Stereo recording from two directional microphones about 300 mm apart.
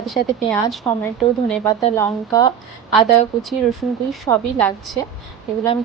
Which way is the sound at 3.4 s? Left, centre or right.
Centre.